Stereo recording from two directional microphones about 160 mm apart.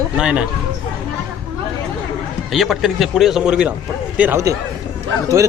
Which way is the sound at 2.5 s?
Centre (ahead or behind).